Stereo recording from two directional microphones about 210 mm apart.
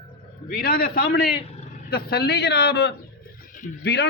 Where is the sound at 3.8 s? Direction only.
55° left (ahead or behind).